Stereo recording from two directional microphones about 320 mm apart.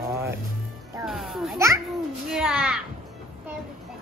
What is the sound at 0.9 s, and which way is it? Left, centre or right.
Music, centre.